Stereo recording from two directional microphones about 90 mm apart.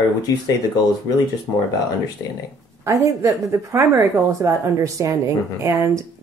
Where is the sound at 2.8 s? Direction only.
35° right (ahead or behind).